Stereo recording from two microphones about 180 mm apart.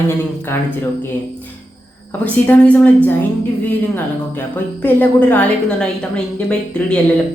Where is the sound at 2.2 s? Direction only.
10° left (ahead or behind).